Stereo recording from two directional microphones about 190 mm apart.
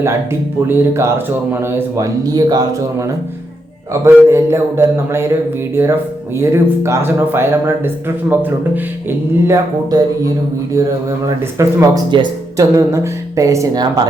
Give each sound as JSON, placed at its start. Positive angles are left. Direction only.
{"t": 0.7, "sound": "speech", "side_deg": -10}
{"t": 5.7, "sound": "speech", "side_deg": -10}
{"t": 11.5, "sound": "speech", "side_deg": -15}